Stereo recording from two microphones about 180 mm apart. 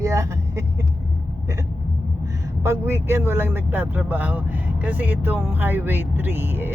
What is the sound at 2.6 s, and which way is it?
Speech, 15° right (ahead or behind).